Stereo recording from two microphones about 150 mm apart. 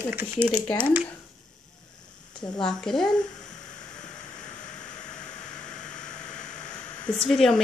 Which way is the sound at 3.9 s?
55° left (ahead or behind).